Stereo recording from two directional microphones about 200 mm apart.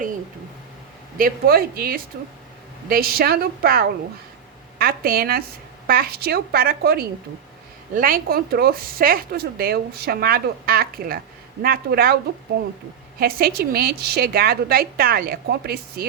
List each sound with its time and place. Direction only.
1.2 s a woman's voice: 50° right (ahead or behind)